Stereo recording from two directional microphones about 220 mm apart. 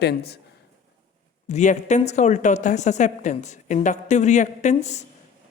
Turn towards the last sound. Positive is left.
turn(degrees=30)  # may be behind; listen again after turning